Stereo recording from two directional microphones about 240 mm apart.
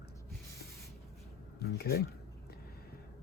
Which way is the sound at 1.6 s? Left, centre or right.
Left.